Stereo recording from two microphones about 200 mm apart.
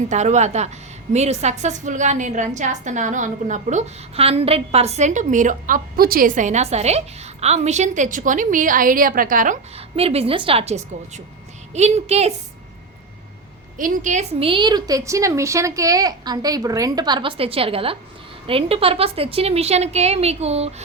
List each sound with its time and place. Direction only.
0.1 s a woman's voice: 35° right (ahead or behind)
9.9 s a woman's voice: 30° right (ahead or behind)
13.7 s a woman's voice: 40° right (ahead or behind)